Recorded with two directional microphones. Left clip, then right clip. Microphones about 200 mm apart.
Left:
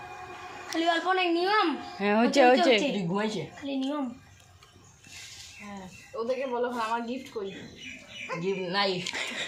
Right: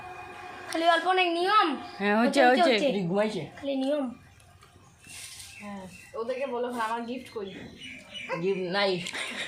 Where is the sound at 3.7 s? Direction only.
40° right (ahead or behind).